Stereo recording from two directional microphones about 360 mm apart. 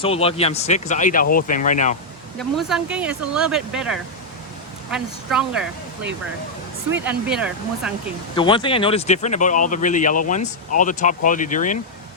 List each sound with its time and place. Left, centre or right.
0.0 s speech: centre
2.4 s speech: centre
8.4 s speech: centre